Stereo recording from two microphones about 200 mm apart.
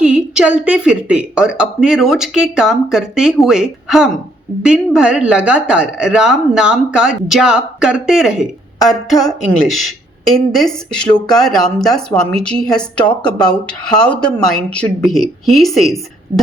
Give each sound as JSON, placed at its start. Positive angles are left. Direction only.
{"t": 0.0, "sound": "a woman's voice", "side_deg": -5}
{"t": 13.2, "sound": "speech", "side_deg": 20}
{"t": 14.0, "sound": "a woman's voice", "side_deg": 5}